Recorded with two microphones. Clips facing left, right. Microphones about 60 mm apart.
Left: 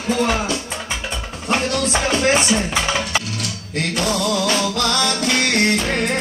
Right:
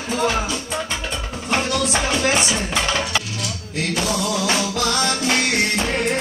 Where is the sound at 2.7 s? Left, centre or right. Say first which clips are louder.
Left 1 dB; centre.